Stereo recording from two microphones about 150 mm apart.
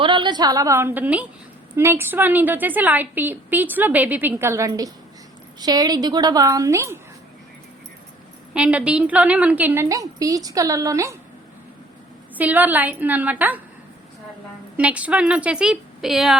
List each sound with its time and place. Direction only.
0.0 s a woman's voice: 30° right (ahead or behind)
8.5 s a woman's voice: 10° right (ahead or behind)
12.4 s a woman's voice: 10° right (ahead or behind)
14.8 s a woman's voice: 10° right (ahead or behind)